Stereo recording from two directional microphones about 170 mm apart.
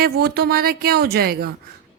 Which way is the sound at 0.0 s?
65° right (ahead or behind).